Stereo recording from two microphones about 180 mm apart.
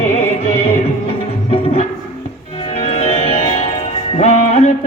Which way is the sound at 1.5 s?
30° left (ahead or behind).